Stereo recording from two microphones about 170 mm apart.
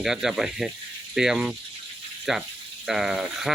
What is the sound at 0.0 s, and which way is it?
Speech, centre (ahead or behind).